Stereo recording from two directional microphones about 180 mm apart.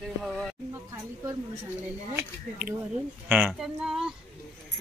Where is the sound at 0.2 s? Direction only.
Centre (ahead or behind).